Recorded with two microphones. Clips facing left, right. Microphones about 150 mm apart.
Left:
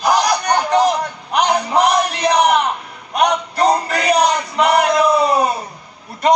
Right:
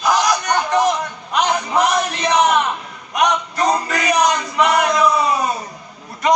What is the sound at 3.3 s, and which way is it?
A man's voice, 30° left (ahead or behind).